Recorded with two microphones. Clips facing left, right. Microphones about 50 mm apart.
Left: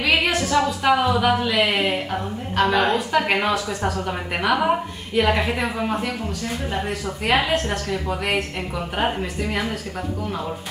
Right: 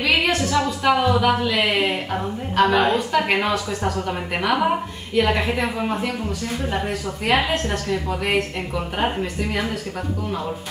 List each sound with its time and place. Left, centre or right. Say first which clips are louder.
0.0 s a woman's voice: even; centre